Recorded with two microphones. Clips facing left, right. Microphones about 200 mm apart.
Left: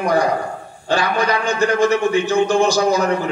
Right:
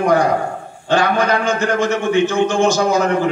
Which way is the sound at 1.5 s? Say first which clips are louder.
Left 2 dB; 35° left (ahead or behind).